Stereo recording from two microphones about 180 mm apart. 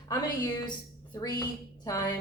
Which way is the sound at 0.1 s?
25° left (ahead or behind).